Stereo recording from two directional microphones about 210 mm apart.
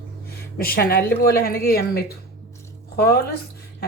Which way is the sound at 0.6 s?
45° left (ahead or behind).